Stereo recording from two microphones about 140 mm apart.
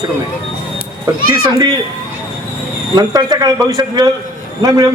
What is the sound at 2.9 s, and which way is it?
A man's voice, 30° right (ahead or behind).